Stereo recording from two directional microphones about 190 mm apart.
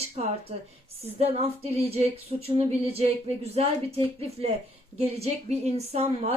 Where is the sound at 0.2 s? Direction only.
35° right (ahead or behind).